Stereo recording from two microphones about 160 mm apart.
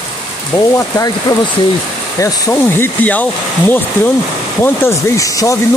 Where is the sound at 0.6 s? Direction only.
20° left (ahead or behind).